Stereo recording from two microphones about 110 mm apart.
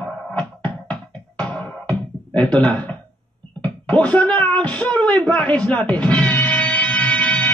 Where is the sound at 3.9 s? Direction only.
15° left (ahead or behind).